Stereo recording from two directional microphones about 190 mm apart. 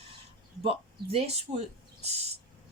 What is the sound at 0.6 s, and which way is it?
Speech, 30° right (ahead or behind).